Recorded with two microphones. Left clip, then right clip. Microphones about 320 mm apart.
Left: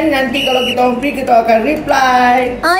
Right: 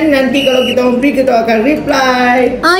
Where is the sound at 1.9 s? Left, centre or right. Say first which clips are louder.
Left 1 dB; centre.